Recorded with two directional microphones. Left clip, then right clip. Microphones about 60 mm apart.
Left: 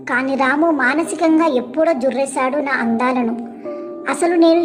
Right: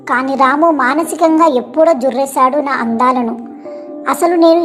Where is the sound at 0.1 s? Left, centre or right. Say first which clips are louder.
Right 5 dB; right.